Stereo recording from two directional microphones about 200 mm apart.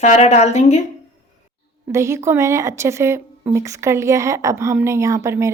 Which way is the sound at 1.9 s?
15° right (ahead or behind).